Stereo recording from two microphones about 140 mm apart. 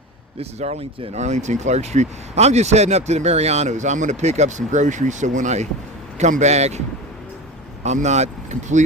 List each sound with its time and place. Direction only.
0.3 s a man's voice: 50° right (ahead or behind)
7.9 s speech: 55° right (ahead or behind)